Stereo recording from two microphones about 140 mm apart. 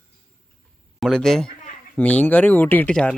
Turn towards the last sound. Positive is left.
turn(degrees=5)  # may be behind; listen again after turning